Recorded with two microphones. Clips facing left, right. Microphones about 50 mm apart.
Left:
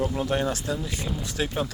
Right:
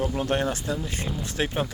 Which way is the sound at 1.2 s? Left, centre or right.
Right.